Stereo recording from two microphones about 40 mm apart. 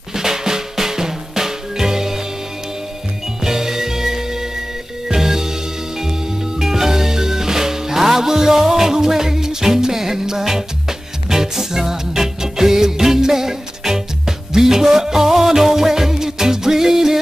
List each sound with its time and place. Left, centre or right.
0.1 s drum: centre
3.4 s music: centre
6.6 s music: centre